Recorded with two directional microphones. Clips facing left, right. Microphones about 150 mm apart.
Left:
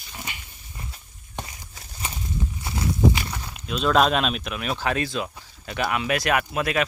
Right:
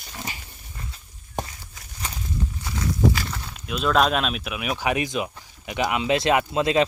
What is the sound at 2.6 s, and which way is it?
Walk, 25° left (ahead or behind).